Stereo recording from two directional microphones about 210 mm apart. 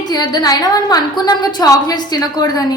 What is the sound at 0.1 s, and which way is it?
A woman's voice, 20° left (ahead or behind).